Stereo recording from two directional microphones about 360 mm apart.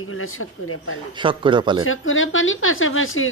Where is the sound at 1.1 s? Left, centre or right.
Centre.